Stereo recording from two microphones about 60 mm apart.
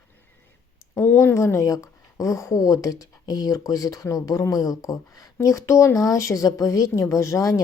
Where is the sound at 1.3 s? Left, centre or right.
Left.